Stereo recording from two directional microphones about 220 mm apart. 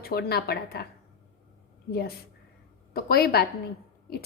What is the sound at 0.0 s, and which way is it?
Speech, 45° left (ahead or behind).